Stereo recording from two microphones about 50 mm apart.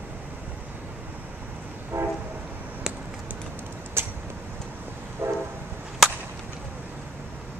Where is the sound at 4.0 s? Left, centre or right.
Right.